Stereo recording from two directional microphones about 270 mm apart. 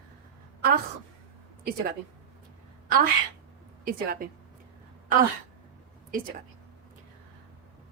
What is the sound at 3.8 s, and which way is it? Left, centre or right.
Speech, right.